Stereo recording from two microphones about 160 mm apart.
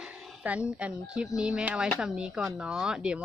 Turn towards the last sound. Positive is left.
turn(degrees=-5)  # may be behind; listen again after turning